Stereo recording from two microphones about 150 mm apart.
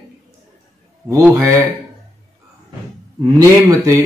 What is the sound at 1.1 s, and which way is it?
Speech, 20° right (ahead or behind).